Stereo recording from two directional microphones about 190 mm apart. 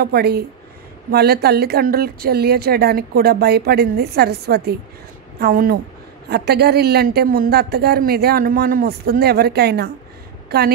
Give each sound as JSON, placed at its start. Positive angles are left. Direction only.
{"t": 0.0, "sound": "speech", "side_deg": -55}